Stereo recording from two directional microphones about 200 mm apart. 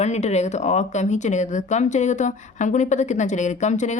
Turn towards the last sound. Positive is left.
turn(degrees=35)  # may be behind; listen again after turning